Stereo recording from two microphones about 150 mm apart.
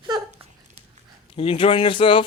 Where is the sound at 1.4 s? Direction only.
35° left (ahead or behind).